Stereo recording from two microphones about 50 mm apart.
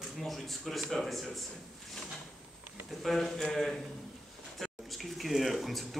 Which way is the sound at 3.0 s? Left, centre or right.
Centre.